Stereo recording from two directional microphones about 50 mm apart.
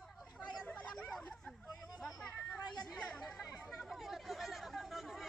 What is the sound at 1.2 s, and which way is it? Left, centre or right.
Hubbub, centre.